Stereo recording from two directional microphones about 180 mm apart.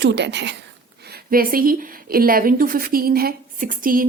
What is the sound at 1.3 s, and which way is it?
A woman's voice, 50° right (ahead or behind).